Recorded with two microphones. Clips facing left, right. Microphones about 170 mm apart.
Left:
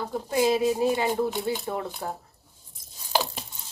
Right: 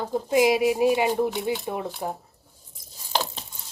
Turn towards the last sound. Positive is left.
turn(degrees=5)  # may be behind; listen again after turning